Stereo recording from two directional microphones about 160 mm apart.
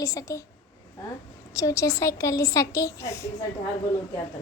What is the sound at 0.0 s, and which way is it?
Speech, 20° left (ahead or behind).